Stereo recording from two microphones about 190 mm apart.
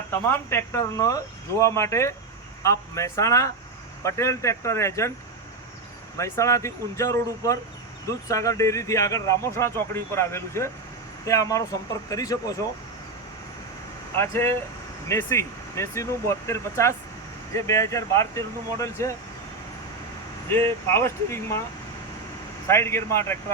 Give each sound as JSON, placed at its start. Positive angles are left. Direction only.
{"t": 0.1, "sound": "speech", "side_deg": 15}
{"t": 6.1, "sound": "speech", "side_deg": 15}
{"t": 14.2, "sound": "speech", "side_deg": 15}
{"t": 20.9, "sound": "speech", "side_deg": 15}
{"t": 22.6, "sound": "speech", "side_deg": 15}